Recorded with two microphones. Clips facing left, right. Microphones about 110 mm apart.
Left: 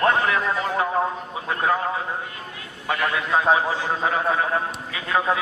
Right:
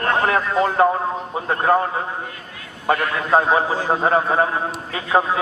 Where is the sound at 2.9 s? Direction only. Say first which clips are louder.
Right 5 dB; 40° right (ahead or behind).